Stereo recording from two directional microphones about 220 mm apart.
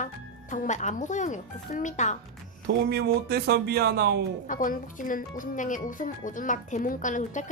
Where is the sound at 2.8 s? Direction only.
45° right (ahead or behind).